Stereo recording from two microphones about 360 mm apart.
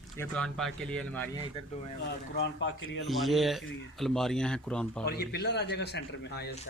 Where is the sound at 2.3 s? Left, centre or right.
Left.